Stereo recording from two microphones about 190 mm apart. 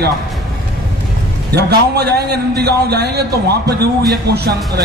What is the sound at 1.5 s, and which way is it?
A man's voice, 60° right (ahead or behind).